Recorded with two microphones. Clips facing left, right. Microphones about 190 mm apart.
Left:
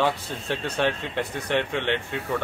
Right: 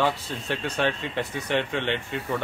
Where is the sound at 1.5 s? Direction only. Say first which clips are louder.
Left 1 dB; 15° right (ahead or behind).